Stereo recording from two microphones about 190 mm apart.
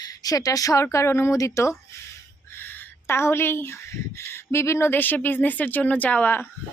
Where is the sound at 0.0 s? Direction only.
20° left (ahead or behind).